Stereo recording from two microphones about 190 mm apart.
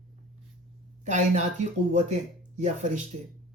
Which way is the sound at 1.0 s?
40° right (ahead or behind).